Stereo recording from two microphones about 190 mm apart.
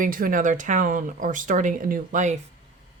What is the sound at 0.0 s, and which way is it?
Speech, 45° right (ahead or behind).